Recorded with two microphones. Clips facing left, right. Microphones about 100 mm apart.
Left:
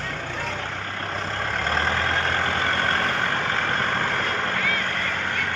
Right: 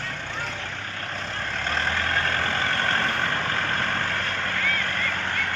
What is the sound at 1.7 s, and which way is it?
Vehicle, 35° left (ahead or behind).